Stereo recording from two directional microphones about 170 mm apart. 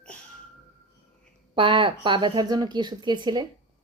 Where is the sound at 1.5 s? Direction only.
30° right (ahead or behind).